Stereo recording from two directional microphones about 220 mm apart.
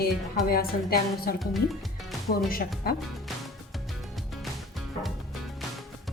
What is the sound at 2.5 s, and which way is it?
Speech, 40° left (ahead or behind).